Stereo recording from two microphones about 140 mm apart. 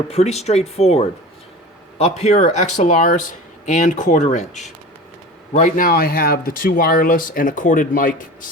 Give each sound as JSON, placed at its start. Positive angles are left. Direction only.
{"t": 0.1, "sound": "speech", "side_deg": 50}
{"t": 5.5, "sound": "speech", "side_deg": 75}